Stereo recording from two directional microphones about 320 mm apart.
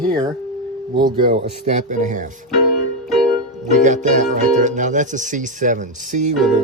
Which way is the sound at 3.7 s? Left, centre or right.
Right.